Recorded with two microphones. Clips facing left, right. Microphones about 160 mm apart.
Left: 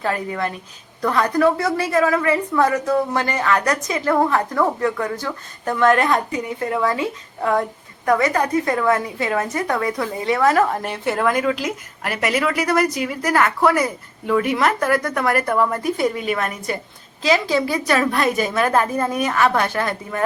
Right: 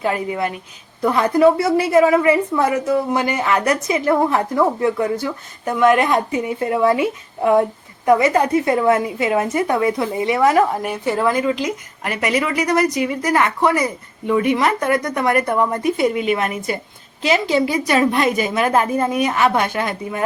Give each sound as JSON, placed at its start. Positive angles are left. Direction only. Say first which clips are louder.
{"t": 0.0, "sound": "a woman's voice", "louder": "right 2 dB", "side_deg": -15}
{"t": 10.8, "sound": "speech", "louder": "right 2 dB", "side_deg": 0}
{"t": 14.8, "sound": "a woman's voice", "louder": "right 1 dB", "side_deg": -20}
{"t": 15.1, "sound": "speech", "louder": "right 2 dB", "side_deg": 0}
{"t": 15.5, "sound": "a woman's voice", "louder": "right 2 dB", "side_deg": -15}